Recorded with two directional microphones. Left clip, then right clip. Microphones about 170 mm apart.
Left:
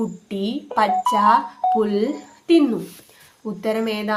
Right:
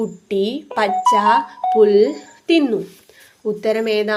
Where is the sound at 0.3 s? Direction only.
40° right (ahead or behind).